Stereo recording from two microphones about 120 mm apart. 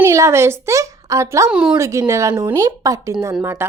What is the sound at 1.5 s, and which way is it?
Speech, 10° right (ahead or behind).